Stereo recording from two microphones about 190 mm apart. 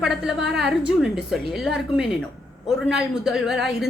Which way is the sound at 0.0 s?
Centre (ahead or behind).